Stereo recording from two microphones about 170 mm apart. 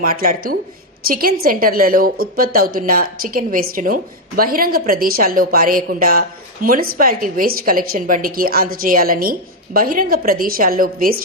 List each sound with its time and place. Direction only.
0.0 s a woman's voice: 60° right (ahead or behind)